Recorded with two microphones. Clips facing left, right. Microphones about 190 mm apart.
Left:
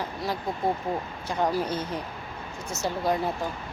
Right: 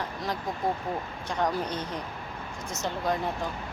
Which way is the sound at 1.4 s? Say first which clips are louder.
Left 3 dB; 5° left (ahead or behind).